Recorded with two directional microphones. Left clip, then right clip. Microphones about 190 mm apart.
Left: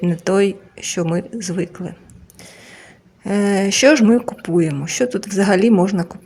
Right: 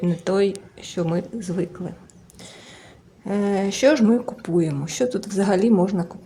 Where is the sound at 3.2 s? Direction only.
15° left (ahead or behind).